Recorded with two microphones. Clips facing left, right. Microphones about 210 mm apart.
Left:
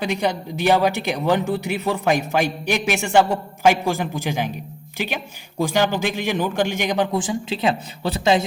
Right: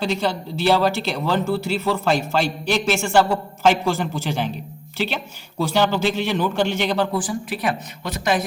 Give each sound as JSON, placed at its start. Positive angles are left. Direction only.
{"t": 0.0, "sound": "a woman's voice", "side_deg": 15}